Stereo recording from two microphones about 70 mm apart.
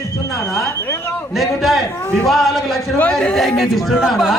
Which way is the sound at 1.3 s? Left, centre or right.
Centre.